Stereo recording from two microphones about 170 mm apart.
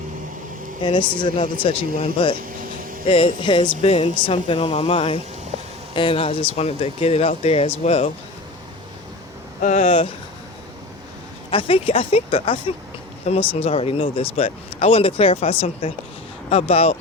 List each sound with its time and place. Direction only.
0.8 s speech: 30° left (ahead or behind)
9.6 s speech: 45° left (ahead or behind)
11.5 s speech: 30° left (ahead or behind)